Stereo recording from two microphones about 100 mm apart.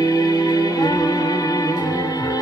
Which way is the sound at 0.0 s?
40° left (ahead or behind).